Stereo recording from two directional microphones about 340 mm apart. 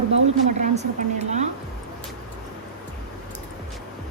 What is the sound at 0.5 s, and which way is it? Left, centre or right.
Speech, centre.